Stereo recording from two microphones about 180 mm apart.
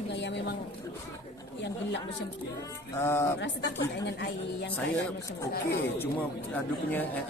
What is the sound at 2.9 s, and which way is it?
Speech, 15° left (ahead or behind).